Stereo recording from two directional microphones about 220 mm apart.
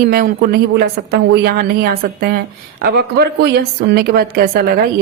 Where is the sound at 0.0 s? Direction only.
45° right (ahead or behind).